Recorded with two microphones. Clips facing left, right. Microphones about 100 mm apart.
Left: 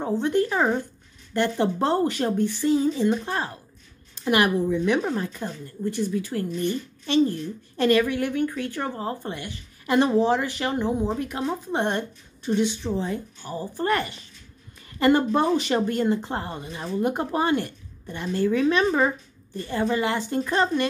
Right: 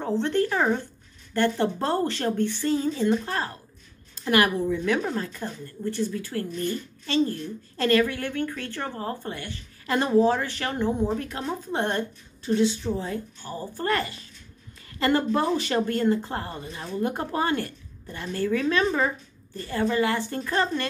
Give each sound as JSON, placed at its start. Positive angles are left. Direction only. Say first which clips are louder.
{"t": 0.0, "sound": "speech", "louder": "left 1 dB", "side_deg": 15}